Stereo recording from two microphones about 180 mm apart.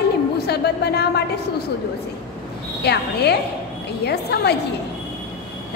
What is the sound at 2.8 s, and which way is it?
A woman's voice, 65° left (ahead or behind).